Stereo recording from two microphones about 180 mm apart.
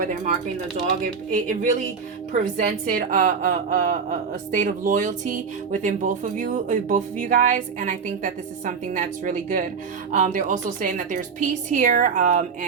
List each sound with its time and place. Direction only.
1.0 s a woman's voice: 50° right (ahead or behind)